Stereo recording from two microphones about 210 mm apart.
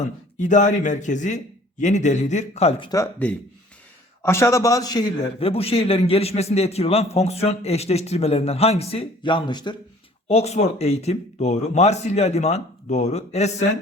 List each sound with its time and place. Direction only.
0.3 s a man's voice: 35° left (ahead or behind)